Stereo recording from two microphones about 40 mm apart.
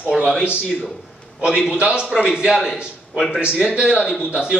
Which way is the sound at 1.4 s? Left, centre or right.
Right.